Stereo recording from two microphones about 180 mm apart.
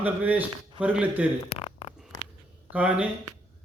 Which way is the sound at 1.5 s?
30° left (ahead or behind).